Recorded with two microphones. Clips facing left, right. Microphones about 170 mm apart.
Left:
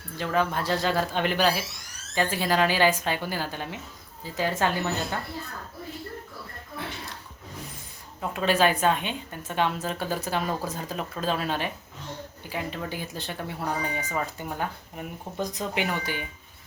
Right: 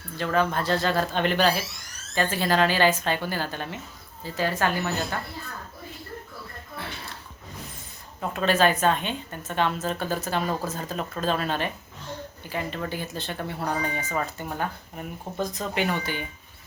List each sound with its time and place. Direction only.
0.2 s a woman's voice: 10° left (ahead or behind)
8.2 s a woman's voice: 10° left (ahead or behind)